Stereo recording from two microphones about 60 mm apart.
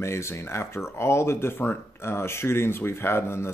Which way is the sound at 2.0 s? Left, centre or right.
Left.